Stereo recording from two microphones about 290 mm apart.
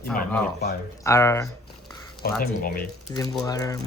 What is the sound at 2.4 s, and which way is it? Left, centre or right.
Speech, left.